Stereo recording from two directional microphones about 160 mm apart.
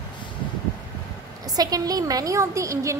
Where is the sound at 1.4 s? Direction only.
25° right (ahead or behind).